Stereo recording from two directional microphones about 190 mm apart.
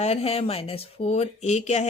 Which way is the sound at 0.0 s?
30° left (ahead or behind).